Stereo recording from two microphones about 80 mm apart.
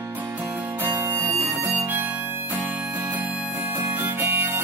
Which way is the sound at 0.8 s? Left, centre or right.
Right.